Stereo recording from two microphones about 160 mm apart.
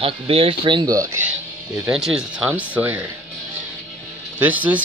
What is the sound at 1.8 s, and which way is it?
Speech, 5° right (ahead or behind).